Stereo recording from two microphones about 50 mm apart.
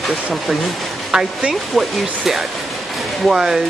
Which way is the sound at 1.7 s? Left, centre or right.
Centre.